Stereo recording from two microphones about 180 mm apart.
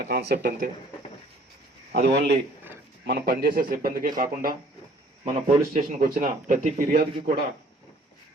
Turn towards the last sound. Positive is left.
turn(degrees=-55)  # may be behind; listen again after turning